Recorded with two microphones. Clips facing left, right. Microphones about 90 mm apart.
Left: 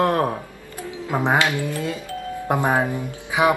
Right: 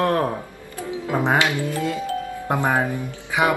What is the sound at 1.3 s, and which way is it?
Speech, 20° right (ahead or behind).